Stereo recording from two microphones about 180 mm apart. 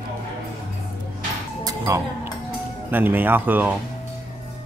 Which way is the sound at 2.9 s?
10° right (ahead or behind).